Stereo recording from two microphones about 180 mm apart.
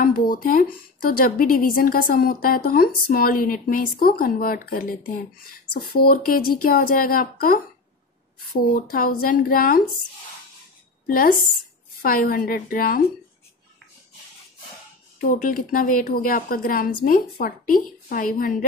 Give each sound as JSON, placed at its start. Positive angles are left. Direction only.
{"t": 0.0, "sound": "a woman's voice", "side_deg": 55}
{"t": 8.7, "sound": "speech", "side_deg": 50}
{"t": 11.1, "sound": "speech", "side_deg": 50}
{"t": 15.1, "sound": "speech", "side_deg": 50}